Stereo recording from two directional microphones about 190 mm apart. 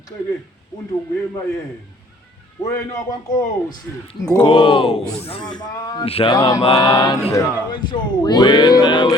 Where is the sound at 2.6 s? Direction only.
15° left (ahead or behind).